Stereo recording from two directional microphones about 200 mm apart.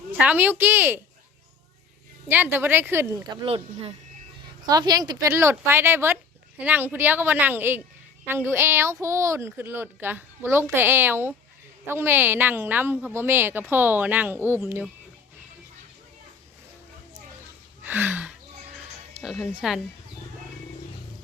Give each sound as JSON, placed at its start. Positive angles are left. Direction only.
{"t": 0.1, "sound": "a woman's voice", "side_deg": -10}
{"t": 2.2, "sound": "a woman's voice", "side_deg": -10}
{"t": 3.4, "sound": "a woman's voice", "side_deg": -30}
{"t": 17.8, "sound": "a sound", "side_deg": -10}
{"t": 19.2, "sound": "speech", "side_deg": 0}